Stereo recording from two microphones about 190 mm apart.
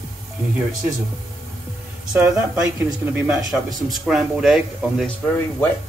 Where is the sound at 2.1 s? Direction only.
15° right (ahead or behind).